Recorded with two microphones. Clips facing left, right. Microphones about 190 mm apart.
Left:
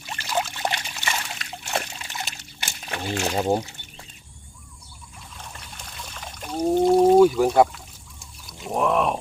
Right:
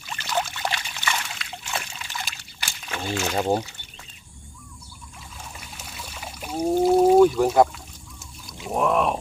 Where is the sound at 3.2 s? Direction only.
10° left (ahead or behind).